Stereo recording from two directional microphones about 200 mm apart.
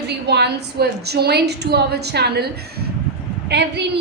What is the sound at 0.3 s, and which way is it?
A woman's voice, 55° right (ahead or behind).